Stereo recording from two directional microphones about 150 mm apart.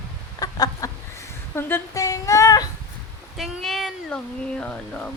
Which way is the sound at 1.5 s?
15° left (ahead or behind).